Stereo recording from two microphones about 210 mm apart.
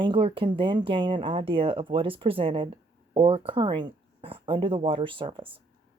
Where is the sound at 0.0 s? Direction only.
25° right (ahead or behind).